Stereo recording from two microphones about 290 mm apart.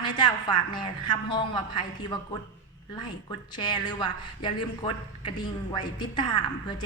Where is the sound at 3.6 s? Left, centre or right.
Centre.